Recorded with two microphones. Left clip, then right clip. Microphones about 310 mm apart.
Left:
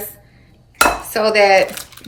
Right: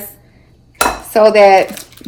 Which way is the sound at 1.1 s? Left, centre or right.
Centre.